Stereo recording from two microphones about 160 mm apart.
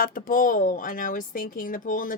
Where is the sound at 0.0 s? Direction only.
60° left (ahead or behind).